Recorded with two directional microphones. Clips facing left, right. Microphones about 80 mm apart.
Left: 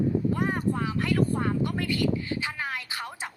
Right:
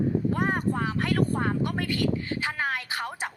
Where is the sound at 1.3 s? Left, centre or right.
Right.